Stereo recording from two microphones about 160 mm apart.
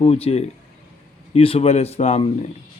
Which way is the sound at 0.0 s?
40° left (ahead or behind).